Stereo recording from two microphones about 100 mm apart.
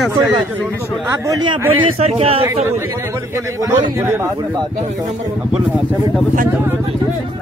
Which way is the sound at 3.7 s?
25° right (ahead or behind).